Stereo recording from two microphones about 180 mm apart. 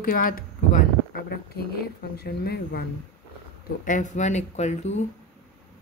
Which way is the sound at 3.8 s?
45° left (ahead or behind).